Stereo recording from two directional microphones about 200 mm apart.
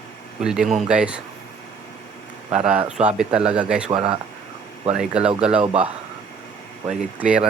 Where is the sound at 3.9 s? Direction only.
30° right (ahead or behind).